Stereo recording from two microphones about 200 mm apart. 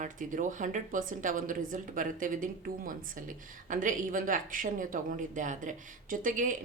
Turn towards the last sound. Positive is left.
turn(degrees=-40)  # may be behind; listen again after turning